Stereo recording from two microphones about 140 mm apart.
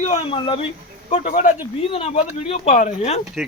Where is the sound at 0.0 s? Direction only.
50° left (ahead or behind).